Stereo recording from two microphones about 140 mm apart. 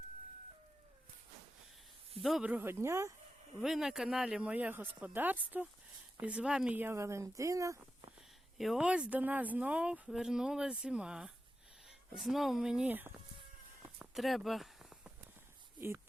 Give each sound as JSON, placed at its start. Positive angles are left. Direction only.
{"t": 2.2, "sound": "speech", "side_deg": 0}
{"t": 2.5, "sound": "speech", "side_deg": -15}
{"t": 3.6, "sound": "speech", "side_deg": -5}
{"t": 8.5, "sound": "speech", "side_deg": 0}
{"t": 14.0, "sound": "a sound", "side_deg": 0}